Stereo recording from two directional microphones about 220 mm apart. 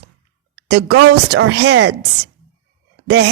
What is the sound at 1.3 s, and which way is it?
Speech, 50° right (ahead or behind).